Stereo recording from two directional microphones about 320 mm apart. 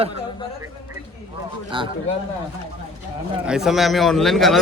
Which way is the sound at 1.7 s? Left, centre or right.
Centre.